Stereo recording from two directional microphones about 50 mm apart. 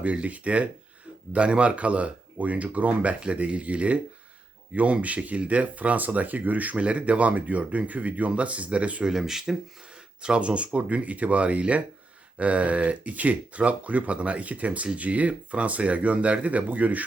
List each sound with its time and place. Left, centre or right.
0.0 s speech: right
9.0 s speech: centre
10.2 s speech: right